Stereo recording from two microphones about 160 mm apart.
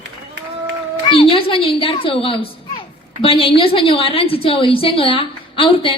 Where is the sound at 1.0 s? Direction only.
35° left (ahead or behind).